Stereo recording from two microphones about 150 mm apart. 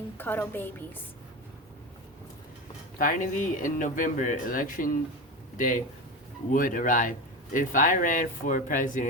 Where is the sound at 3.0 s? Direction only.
60° left (ahead or behind).